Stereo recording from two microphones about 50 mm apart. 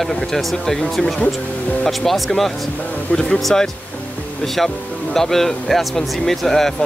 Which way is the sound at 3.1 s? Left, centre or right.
Left.